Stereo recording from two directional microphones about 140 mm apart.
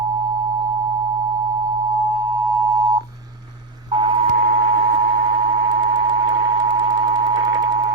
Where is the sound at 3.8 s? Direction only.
35° right (ahead or behind).